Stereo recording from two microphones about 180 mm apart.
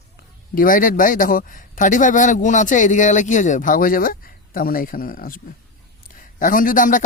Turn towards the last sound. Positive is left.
turn(degrees=45)  # may be behind; listen again after turning